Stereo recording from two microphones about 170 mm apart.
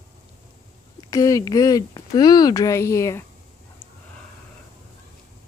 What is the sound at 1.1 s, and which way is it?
Speech, 20° left (ahead or behind).